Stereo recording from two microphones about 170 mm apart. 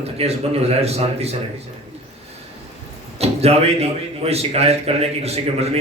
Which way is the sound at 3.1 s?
35° right (ahead or behind).